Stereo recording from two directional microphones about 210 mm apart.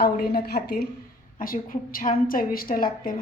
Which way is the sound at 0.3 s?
50° left (ahead or behind).